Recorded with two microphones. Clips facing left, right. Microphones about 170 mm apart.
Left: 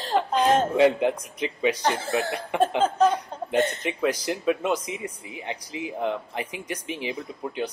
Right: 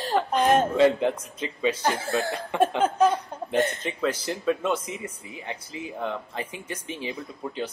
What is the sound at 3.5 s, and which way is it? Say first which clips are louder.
Speech: left 1 dB; 10° left (ahead or behind).